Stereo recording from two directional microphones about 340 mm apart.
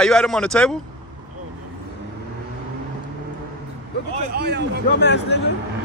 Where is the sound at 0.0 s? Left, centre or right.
Centre.